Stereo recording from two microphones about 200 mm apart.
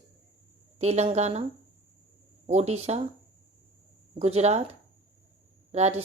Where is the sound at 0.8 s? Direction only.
35° right (ahead or behind).